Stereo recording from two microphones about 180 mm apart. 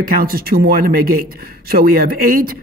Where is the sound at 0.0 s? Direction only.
55° right (ahead or behind).